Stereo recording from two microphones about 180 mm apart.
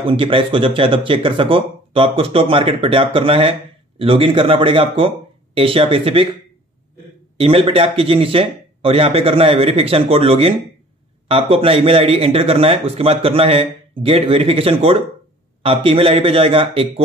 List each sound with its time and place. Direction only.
0.0 s a man's voice: 30° right (ahead or behind)
7.3 s a man's voice: 30° right (ahead or behind)